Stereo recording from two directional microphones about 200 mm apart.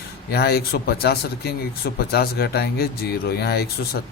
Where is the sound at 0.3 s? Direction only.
50° left (ahead or behind).